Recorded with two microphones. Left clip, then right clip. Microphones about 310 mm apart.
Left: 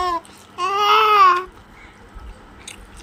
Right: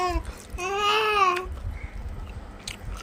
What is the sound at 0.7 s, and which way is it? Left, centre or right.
Babbling, left.